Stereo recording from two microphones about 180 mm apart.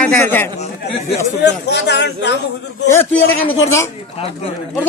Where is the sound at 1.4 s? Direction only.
70° left (ahead or behind).